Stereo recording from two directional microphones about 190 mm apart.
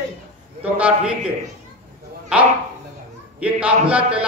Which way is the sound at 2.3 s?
5° right (ahead or behind).